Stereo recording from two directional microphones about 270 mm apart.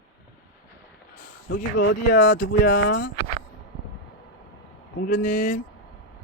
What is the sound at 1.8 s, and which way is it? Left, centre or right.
Speech, left.